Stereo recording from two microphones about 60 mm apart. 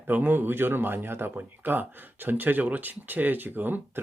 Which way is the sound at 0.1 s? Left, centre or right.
Right.